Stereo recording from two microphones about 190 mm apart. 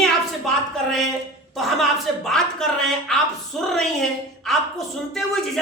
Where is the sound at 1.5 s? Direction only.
Centre (ahead or behind).